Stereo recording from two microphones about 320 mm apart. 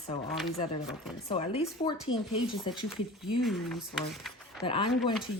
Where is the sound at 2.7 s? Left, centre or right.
Centre.